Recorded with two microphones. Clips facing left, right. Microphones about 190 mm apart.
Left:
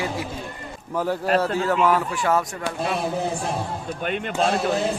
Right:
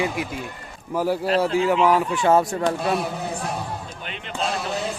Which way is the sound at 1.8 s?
20° right (ahead or behind).